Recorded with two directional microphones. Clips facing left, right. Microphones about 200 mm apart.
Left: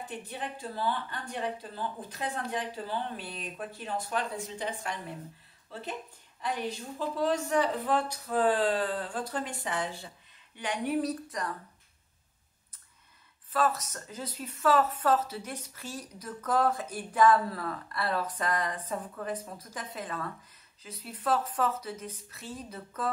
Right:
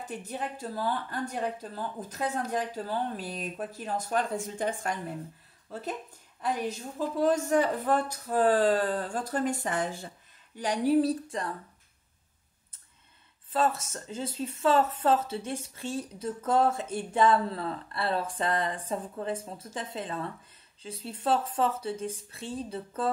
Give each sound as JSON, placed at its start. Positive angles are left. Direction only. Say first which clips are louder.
{"t": 0.1, "sound": "speech", "louder": "right 5 dB", "side_deg": -45}
{"t": 13.5, "sound": "speech", "louder": "right 1 dB", "side_deg": -25}